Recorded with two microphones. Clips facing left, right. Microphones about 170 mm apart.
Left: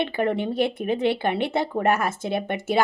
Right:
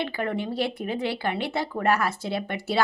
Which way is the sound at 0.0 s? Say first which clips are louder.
Left 4 dB; 25° left (ahead or behind).